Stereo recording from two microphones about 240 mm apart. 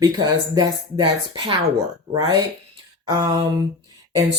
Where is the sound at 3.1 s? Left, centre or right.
Centre.